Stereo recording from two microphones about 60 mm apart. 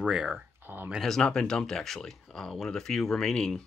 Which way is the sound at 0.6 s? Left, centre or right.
Right.